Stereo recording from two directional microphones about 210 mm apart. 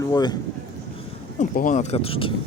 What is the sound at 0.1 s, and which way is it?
Speech, 20° left (ahead or behind).